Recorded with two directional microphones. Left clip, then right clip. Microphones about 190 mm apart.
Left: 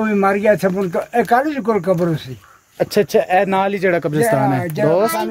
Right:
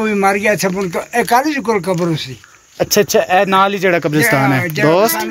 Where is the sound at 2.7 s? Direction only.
Centre (ahead or behind).